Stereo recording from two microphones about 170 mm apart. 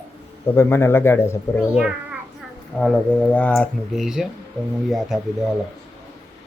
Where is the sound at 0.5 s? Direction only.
15° left (ahead or behind).